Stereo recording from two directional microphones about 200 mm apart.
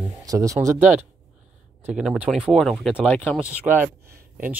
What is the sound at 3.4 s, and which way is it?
Speech, 5° right (ahead or behind).